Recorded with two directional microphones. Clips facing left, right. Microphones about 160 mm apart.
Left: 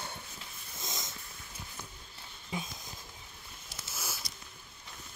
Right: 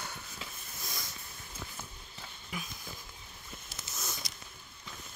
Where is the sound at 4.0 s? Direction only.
10° left (ahead or behind).